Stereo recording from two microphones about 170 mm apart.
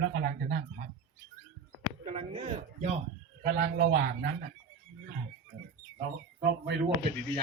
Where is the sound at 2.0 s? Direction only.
35° right (ahead or behind).